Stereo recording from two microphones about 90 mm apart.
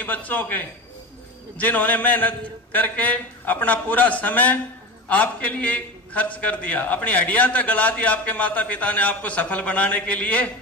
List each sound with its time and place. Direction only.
0.0 s a man's voice: 20° left (ahead or behind)